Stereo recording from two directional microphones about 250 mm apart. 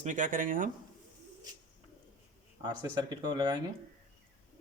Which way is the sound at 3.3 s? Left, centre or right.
Centre.